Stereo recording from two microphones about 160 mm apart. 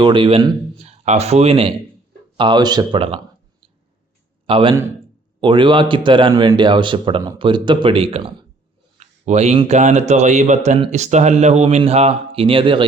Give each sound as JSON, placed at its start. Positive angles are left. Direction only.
{"t": 0.0, "sound": "speech", "side_deg": -30}
{"t": 4.4, "sound": "a man's voice", "side_deg": -35}
{"t": 9.0, "sound": "a man's voice", "side_deg": -45}